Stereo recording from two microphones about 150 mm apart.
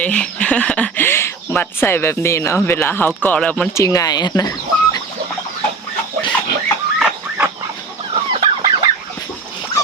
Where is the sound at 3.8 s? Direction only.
25° left (ahead or behind).